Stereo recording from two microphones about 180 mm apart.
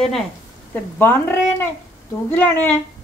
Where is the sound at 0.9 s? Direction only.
10° left (ahead or behind).